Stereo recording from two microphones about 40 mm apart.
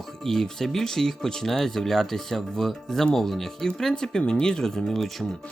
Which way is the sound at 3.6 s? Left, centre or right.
Centre.